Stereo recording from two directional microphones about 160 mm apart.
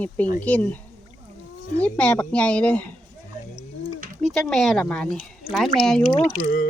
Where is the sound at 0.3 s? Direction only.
10° left (ahead or behind).